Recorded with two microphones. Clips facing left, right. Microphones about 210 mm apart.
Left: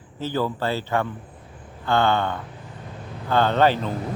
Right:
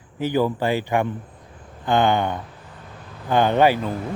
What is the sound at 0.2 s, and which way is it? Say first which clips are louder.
Speech: right 4 dB; 15° right (ahead or behind).